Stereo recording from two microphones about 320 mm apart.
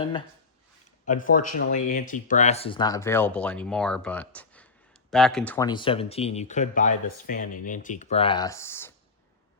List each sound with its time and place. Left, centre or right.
0.0 s speech: centre
1.4 s speech: left
1.7 s speech: left; by 8.9 s centre